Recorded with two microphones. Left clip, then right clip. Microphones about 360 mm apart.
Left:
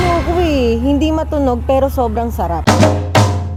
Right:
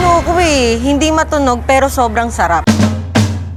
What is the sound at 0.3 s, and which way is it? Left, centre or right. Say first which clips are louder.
A woman's voice: right 3 dB; right.